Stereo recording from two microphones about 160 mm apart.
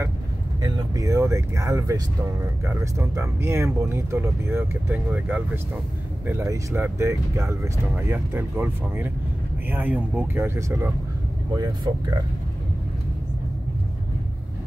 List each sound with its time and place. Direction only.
0.6 s speech: 20° right (ahead or behind)